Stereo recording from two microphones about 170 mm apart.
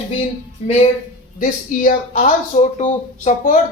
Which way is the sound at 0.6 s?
40° left (ahead or behind).